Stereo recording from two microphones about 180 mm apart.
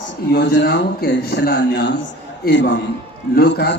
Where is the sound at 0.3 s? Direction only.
70° left (ahead or behind).